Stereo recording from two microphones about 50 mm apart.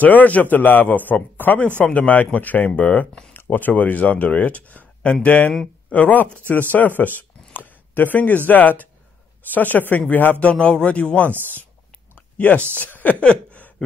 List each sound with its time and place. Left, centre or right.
0.0 s speech: left
7.2 s speech: left
10.4 s speech: left
12.4 s speech: left
12.7 s a sound: left